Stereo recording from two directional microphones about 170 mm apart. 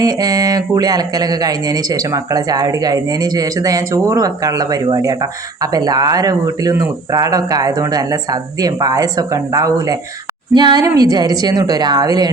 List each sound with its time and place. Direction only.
0.0 s speech: 20° right (ahead or behind)